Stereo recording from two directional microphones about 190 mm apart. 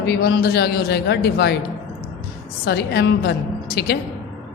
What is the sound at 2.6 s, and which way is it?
A woman's voice, 60° left (ahead or behind).